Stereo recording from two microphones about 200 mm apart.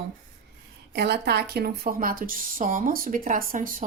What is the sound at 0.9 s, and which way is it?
A woman's voice, 55° right (ahead or behind).